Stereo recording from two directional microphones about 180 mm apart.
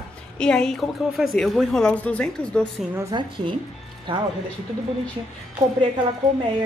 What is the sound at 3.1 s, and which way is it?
A woman's voice, 25° right (ahead or behind).